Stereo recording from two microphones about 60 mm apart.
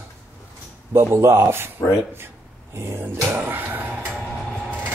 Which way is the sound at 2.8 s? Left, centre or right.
Right.